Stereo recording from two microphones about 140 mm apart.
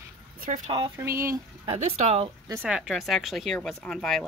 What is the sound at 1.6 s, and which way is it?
Speech, 45° right (ahead or behind).